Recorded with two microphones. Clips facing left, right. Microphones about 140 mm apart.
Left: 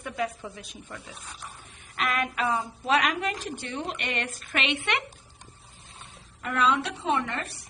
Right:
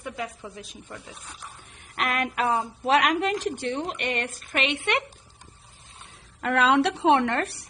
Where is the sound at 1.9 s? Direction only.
60° right (ahead or behind).